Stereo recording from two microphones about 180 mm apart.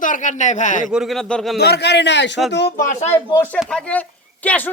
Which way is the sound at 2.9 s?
40° left (ahead or behind).